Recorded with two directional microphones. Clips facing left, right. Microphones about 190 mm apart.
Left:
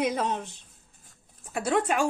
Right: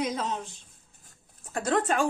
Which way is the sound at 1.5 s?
10° left (ahead or behind).